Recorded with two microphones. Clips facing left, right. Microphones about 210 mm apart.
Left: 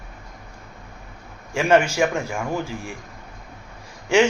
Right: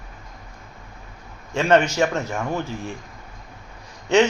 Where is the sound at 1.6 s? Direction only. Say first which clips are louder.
Even; 10° left (ahead or behind).